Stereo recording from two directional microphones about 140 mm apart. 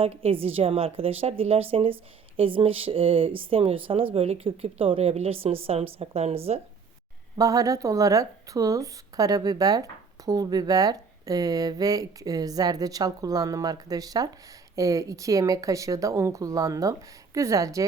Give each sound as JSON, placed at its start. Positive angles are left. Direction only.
{"t": 0.0, "sound": "a woman's voice", "side_deg": -45}
{"t": 7.3, "sound": "speech", "side_deg": -25}